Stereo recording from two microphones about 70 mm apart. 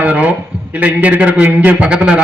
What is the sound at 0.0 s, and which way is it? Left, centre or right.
A man's voice, centre.